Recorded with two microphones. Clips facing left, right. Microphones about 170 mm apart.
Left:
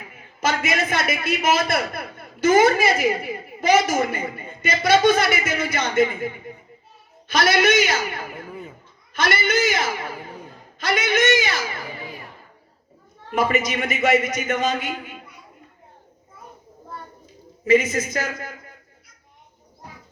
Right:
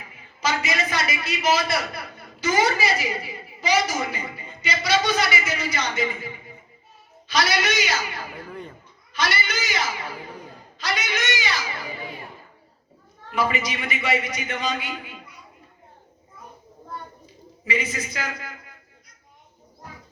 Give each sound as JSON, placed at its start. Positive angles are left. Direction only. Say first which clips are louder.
{"t": 0.1, "sound": "a man's voice", "louder": "left 2 dB", "side_deg": 55}
{"t": 8.4, "sound": "a sound", "louder": "left 1 dB", "side_deg": 5}
{"t": 9.1, "sound": "a man's voice", "louder": "left 6 dB", "side_deg": 50}
{"t": 13.3, "sound": "a man's voice", "louder": "left 4 dB", "side_deg": 45}
{"t": 17.7, "sound": "a man's voice", "louder": "left 10 dB", "side_deg": 45}